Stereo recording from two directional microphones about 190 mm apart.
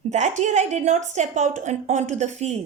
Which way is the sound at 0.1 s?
35° right (ahead or behind).